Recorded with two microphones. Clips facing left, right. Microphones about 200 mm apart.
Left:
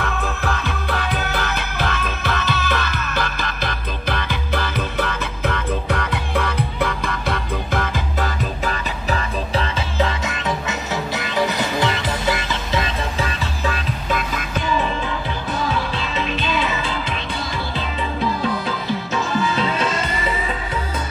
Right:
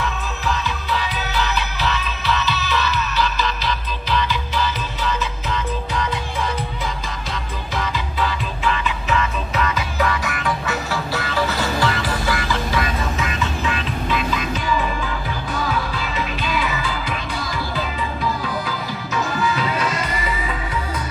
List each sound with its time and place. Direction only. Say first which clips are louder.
0.0 s music: left 2 dB; 55° left (ahead or behind); by 13.7 s 35° left (ahead or behind)
15.7 s music: left 1 dB; 25° left (ahead or behind)
19.4 s music: left 1 dB; 25° left (ahead or behind)